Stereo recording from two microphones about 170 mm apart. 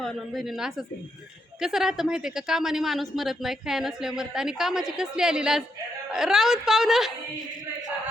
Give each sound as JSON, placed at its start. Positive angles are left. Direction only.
{"t": 0.0, "sound": "a woman's voice", "side_deg": 0}